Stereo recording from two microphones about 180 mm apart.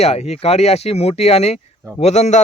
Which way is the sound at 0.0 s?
35° left (ahead or behind).